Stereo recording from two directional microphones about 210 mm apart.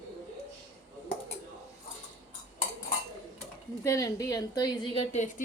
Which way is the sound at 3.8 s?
15° left (ahead or behind).